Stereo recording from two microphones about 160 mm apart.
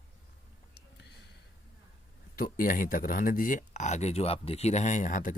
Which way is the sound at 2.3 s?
60° left (ahead or behind).